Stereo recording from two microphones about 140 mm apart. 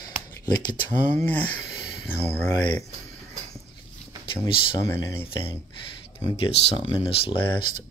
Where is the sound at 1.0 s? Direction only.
10° left (ahead or behind).